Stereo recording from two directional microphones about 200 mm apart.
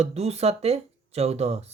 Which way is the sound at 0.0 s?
30° right (ahead or behind).